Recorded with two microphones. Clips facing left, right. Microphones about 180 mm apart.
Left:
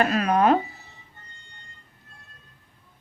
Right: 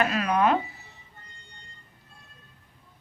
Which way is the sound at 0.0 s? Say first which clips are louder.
Left 3 dB; 40° left (ahead or behind).